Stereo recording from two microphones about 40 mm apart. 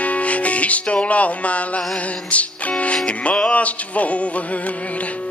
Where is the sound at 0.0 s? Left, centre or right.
Left.